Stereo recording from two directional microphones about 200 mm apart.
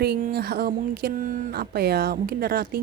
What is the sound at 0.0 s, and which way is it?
Speech, 55° right (ahead or behind).